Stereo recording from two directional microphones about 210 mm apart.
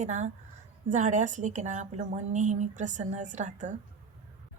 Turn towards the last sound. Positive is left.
turn(degrees=-35)  # may be behind; listen again after turning